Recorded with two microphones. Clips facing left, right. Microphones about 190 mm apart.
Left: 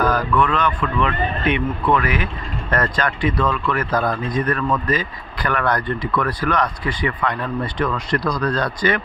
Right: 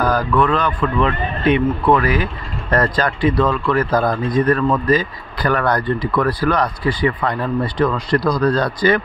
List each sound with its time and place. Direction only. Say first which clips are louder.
0.0 s speech: right 2 dB; 35° right (ahead or behind)